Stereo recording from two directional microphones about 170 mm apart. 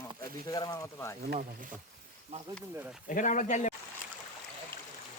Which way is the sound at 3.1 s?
50° left (ahead or behind).